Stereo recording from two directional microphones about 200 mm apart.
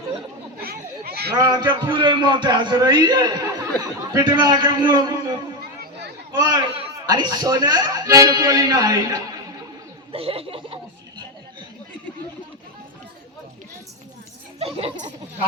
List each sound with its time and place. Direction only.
0.6 s children playing: 50° right (ahead or behind)
1.4 s a man's voice: 20° right (ahead or behind)
6.4 s a man's voice: 20° right (ahead or behind)
14.6 s speech: 30° right (ahead or behind)